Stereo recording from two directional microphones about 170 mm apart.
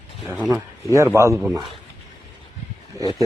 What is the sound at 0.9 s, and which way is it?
Speech, 15° right (ahead or behind).